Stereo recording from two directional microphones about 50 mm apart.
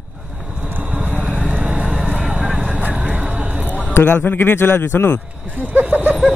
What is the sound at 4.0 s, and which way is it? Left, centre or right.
A man's voice, left.